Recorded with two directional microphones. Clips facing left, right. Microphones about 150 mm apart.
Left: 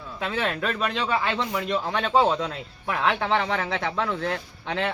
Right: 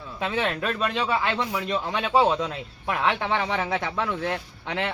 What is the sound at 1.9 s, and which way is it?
Speech, 10° right (ahead or behind).